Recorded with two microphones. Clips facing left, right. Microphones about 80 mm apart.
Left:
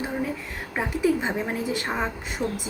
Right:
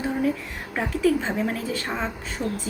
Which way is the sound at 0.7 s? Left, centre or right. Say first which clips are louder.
Right 1 dB; centre.